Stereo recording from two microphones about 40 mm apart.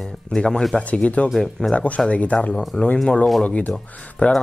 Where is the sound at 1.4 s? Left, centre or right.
Centre.